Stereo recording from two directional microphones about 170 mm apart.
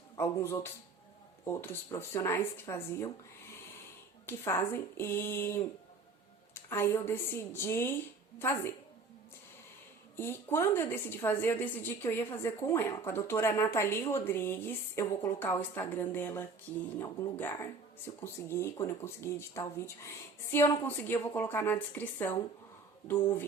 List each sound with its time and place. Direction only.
0.2 s a woman's voice: 15° left (ahead or behind)
4.3 s a woman's voice: 15° left (ahead or behind)
10.2 s a woman's voice: 15° left (ahead or behind)